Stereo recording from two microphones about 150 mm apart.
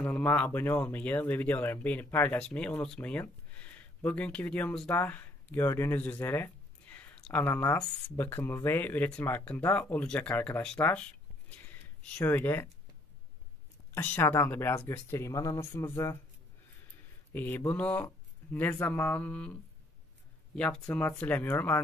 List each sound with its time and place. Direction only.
0.0 s speech: 10° left (ahead or behind)
13.9 s speech: 15° left (ahead or behind)
17.3 s speech: 10° left (ahead or behind)